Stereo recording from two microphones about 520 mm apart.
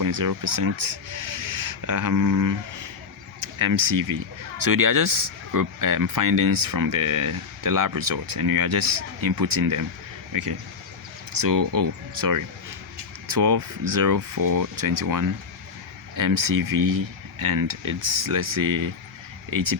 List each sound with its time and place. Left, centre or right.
0.0 s speech: right
1.9 s speech: right
3.6 s speech: right